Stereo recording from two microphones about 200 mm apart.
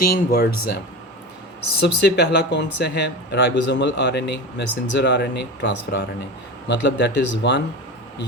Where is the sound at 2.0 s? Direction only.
55° left (ahead or behind).